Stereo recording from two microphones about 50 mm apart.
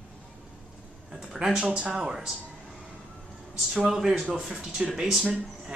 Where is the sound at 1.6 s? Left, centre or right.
Right.